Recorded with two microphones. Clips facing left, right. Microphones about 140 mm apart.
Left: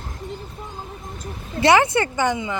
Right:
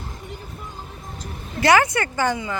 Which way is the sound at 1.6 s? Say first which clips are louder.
Left 1 dB; 25° left (ahead or behind).